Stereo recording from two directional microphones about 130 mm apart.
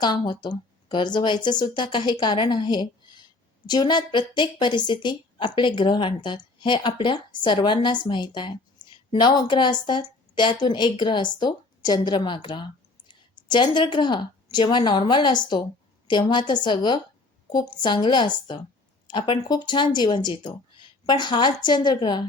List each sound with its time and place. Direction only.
0.0 s a woman's voice: 35° left (ahead or behind)